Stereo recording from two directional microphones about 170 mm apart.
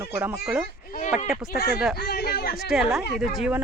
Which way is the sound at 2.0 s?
65° left (ahead or behind).